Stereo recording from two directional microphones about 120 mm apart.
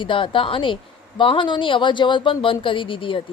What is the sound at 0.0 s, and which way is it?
A woman's voice, 45° left (ahead or behind).